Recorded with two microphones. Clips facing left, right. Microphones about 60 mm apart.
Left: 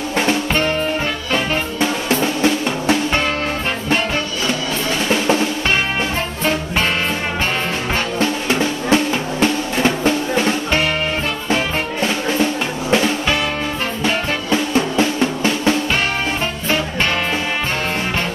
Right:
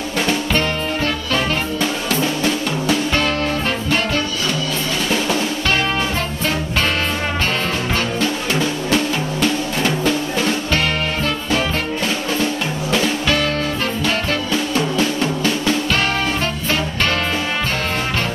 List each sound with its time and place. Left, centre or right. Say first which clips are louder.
0.3 s music: left 1 dB; left
8.2 s drum: left 2 dB; left
11.5 s music: left 2 dB; left
14.0 s drum: left 3 dB; left